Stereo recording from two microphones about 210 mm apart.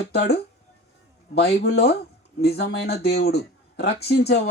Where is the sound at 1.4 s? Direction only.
50° left (ahead or behind).